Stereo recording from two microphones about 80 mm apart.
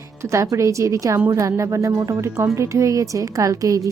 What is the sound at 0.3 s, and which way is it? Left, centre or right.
A woman's voice, right.